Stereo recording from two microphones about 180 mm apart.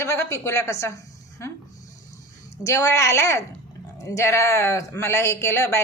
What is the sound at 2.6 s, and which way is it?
Speech, 15° left (ahead or behind).